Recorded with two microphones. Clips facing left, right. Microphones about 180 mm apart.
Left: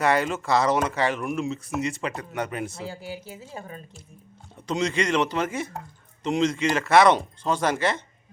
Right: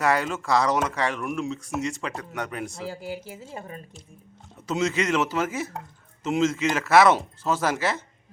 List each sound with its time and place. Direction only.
0.0 s speech: centre (ahead or behind)
3.4 s speech: 25° right (ahead or behind)
4.5 s speech: 5° right (ahead or behind)